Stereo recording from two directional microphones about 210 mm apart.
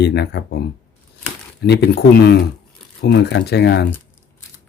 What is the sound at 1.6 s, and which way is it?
Speech, 55° left (ahead or behind).